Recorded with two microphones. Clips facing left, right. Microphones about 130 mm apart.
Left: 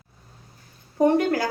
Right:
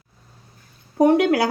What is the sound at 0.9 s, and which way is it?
Speech, 85° right.